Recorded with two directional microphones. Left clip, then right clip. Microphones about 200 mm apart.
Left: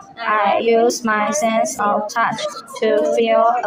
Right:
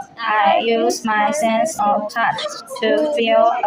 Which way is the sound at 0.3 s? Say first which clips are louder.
Even; 10° left (ahead or behind).